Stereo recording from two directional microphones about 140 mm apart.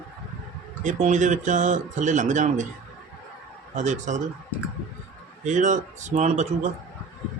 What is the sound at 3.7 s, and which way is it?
Speech, 60° right (ahead or behind).